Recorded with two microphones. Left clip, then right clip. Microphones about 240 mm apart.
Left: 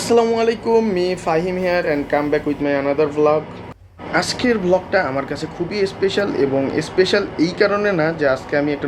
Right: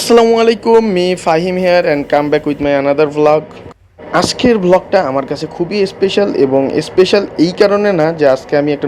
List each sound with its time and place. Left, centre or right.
0.0 s speech: right